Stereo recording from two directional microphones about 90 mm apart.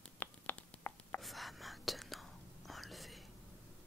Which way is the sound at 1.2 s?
Centre (ahead or behind).